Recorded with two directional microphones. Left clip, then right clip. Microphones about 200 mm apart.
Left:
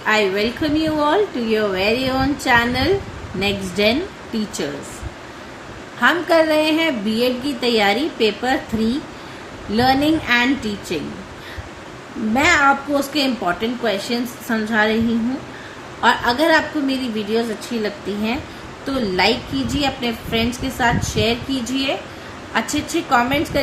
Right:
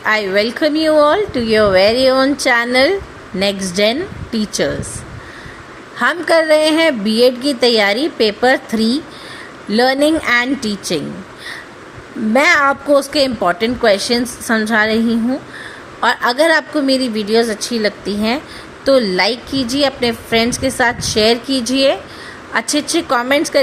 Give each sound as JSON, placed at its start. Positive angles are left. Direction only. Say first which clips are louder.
{"t": 0.0, "sound": "a woman's voice", "louder": "right 3 dB", "side_deg": -50}
{"t": 6.0, "sound": "a woman's voice", "louder": "right 2 dB", "side_deg": -50}
{"t": 12.3, "sound": "a woman's voice", "louder": "right 3 dB", "side_deg": -50}
{"t": 16.0, "sound": "a woman's voice", "louder": "right 3 dB", "side_deg": -50}